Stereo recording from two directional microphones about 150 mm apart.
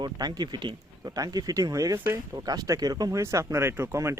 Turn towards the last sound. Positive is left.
turn(degrees=-20)  # may be behind; listen again after turning